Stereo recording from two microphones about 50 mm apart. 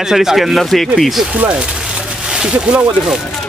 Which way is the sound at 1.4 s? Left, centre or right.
Right.